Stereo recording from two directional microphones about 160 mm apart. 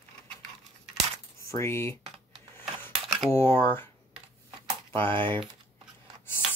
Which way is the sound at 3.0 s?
Centre (ahead or behind).